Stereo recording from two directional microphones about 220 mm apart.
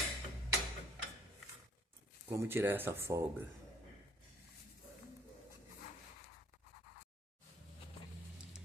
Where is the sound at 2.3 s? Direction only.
10° right (ahead or behind).